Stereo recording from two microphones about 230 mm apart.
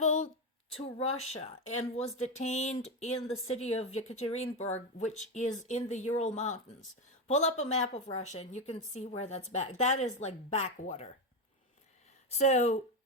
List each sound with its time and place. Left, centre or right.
0.0 s a sound: left
1.2 s a woman's voice: left
12.4 s a woman's voice: left